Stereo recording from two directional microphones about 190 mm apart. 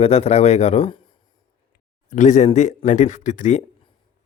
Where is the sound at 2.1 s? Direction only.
40° left (ahead or behind).